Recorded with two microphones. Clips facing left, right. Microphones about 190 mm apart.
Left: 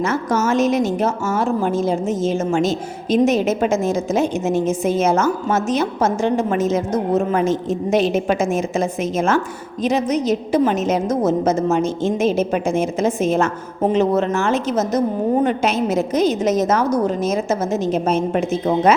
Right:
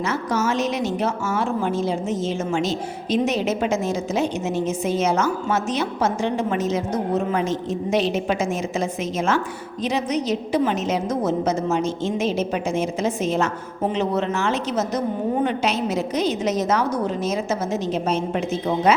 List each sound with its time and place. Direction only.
0.0 s a woman's voice: 50° left (ahead or behind)